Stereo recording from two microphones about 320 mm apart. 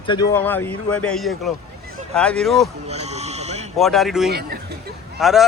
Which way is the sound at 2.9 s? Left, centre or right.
Centre.